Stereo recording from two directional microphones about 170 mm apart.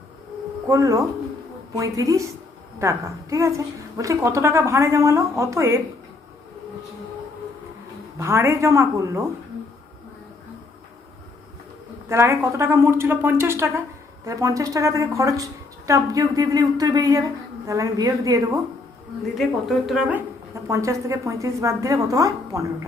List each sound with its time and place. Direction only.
0.7 s a woman's voice: 20° right (ahead or behind)
8.2 s a woman's voice: 15° right (ahead or behind)
12.0 s a woman's voice: 15° right (ahead or behind)
19.4 s a woman's voice: centre (ahead or behind)
20.7 s a woman's voice: 15° right (ahead or behind)